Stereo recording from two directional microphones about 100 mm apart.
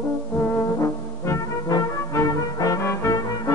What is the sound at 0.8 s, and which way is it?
Music, 30° left (ahead or behind).